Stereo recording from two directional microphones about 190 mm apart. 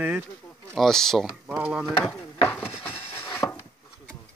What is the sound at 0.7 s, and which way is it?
Speech, centre (ahead or behind).